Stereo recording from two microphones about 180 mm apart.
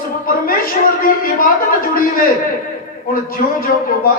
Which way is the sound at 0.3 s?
55° left (ahead or behind).